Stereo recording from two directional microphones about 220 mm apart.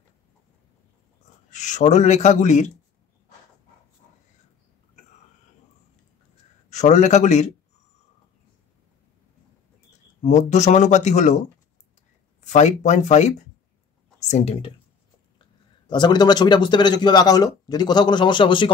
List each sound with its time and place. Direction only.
1.5 s speech: 35° left (ahead or behind)
6.7 s speech: 30° left (ahead or behind)
10.2 s speech: 30° left (ahead or behind)
12.4 s a man's voice: 35° left (ahead or behind)
15.9 s a man's voice: 20° left (ahead or behind)